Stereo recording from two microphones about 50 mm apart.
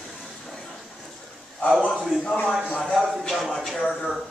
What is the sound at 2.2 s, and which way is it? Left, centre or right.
Speech, left.